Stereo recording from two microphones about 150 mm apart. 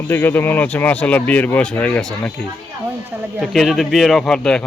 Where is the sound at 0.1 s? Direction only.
15° left (ahead or behind).